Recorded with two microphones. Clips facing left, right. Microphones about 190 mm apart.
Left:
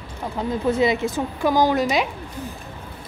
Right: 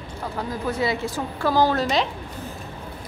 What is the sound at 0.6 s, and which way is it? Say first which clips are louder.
Speech: left 5 dB; 20° left (ahead or behind).